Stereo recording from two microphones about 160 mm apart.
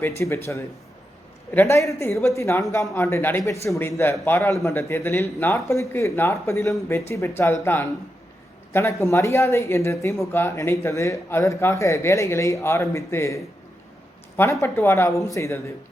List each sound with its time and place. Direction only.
0.2 s a woman's voice: 20° left (ahead or behind)
14.6 s a woman's voice: 15° left (ahead or behind)